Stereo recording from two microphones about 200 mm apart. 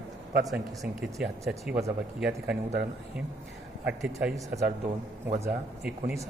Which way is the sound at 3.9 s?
5° right (ahead or behind).